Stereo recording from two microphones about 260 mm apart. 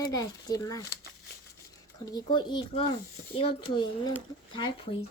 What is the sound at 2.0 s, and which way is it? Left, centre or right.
Speech, centre.